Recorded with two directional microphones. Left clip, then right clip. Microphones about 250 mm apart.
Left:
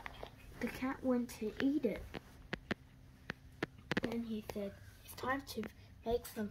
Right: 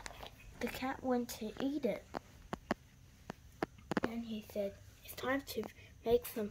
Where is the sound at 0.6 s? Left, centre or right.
Right.